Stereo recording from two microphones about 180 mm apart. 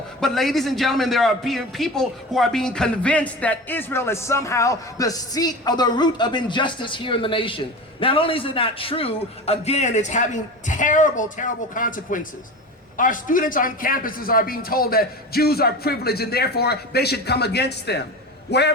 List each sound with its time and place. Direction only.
0.2 s a man's voice: centre (ahead or behind); by 18.0 s 65° left (ahead or behind)